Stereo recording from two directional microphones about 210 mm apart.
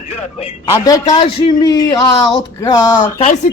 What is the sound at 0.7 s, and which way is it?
A man's voice, 15° left (ahead or behind).